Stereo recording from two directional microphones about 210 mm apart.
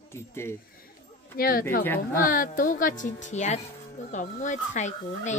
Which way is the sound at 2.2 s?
40° left (ahead or behind).